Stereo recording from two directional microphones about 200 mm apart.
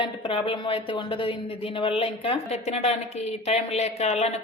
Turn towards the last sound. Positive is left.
turn(degrees=30)  # may be behind; listen again after turning